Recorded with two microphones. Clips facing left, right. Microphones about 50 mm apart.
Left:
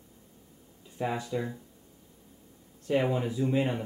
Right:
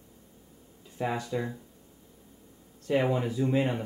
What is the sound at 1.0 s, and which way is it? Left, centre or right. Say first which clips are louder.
Speech: right 1 dB; centre.